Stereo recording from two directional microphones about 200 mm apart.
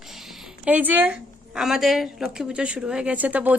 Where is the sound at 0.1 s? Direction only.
Centre (ahead or behind).